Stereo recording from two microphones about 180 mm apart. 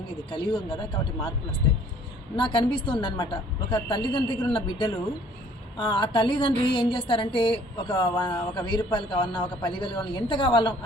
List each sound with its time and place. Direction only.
0.3 s a woman's voice: 25° left (ahead or behind)
2.3 s a woman's voice: 25° left (ahead or behind)